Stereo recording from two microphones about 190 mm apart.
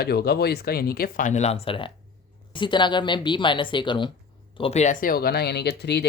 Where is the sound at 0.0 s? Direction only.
55° left (ahead or behind).